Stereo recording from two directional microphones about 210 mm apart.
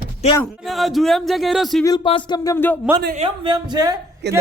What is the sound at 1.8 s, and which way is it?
Music, 20° left (ahead or behind).